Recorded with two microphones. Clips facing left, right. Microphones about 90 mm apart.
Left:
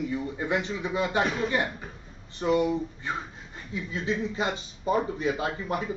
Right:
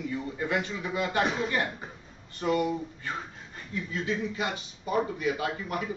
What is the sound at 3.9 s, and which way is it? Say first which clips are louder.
A man's voice: left 2 dB; 25° left (ahead or behind).